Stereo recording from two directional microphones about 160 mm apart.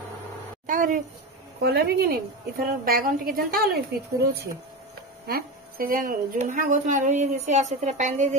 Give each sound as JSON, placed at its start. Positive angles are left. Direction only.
{"t": 0.7, "sound": "a sound", "side_deg": -60}
{"t": 1.6, "sound": "a woman's voice", "side_deg": -80}
{"t": 5.2, "sound": "a woman's voice", "side_deg": -70}